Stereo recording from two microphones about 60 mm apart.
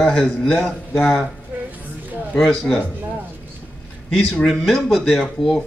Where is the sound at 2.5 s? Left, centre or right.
Centre.